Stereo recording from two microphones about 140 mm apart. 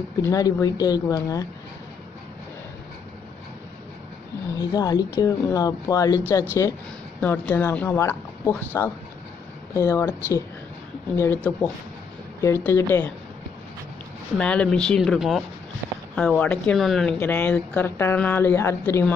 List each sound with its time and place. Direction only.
0.2 s speech: 25° left (ahead or behind)
4.6 s speech: 25° left (ahead or behind)
7.2 s speech: 10° left (ahead or behind)
14.4 s speech: 10° left (ahead or behind)